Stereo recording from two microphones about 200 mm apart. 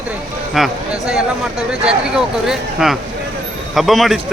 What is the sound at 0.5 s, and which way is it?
Speech, centre (ahead or behind).